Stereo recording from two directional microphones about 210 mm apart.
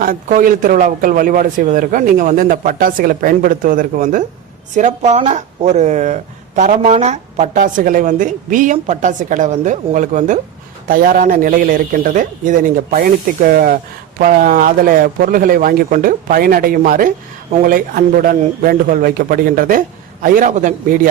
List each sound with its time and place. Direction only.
0.0 s speech: 40° right (ahead or behind)